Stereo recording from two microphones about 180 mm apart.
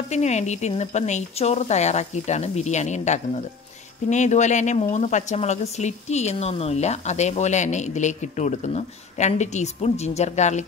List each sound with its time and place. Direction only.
0.1 s speech: 40° left (ahead or behind)